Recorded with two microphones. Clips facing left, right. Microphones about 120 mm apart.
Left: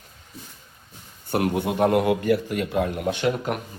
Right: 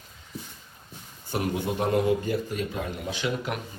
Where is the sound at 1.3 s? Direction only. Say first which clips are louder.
Left 5 dB; 60° left (ahead or behind).